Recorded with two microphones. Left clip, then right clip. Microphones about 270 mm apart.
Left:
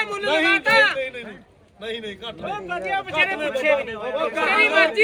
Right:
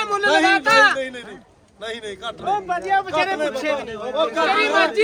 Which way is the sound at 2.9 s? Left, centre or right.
Centre.